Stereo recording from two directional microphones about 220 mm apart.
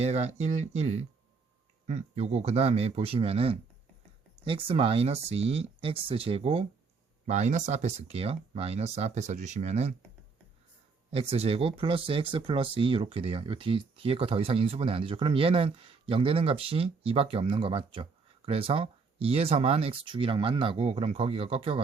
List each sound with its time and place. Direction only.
0.0 s speech: 30° right (ahead or behind)
11.1 s speech: 25° right (ahead or behind)